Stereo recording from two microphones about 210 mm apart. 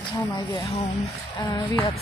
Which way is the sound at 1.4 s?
20° left (ahead or behind).